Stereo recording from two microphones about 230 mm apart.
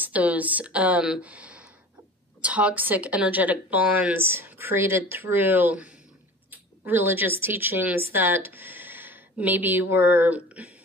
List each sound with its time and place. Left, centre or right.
0.0 s speech: centre